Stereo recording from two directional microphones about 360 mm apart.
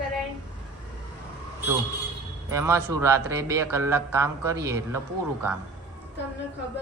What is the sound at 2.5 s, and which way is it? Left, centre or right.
A man's voice, centre.